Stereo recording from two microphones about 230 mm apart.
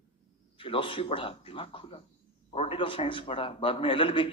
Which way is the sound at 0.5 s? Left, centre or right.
Left.